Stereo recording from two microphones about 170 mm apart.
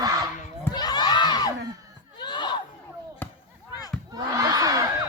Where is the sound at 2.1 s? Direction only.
25° left (ahead or behind).